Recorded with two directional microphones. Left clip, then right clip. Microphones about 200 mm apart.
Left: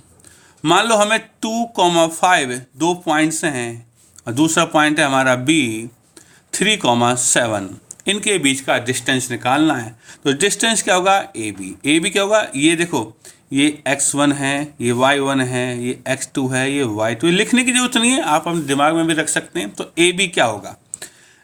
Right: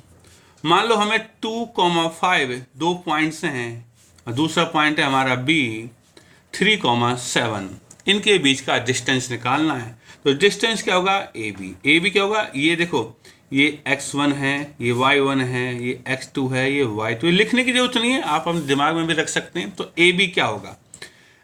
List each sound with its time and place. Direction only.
0.6 s a man's voice: 50° left (ahead or behind)